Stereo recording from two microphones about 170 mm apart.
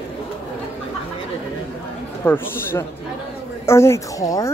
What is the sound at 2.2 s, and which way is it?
Speech, 15° left (ahead or behind).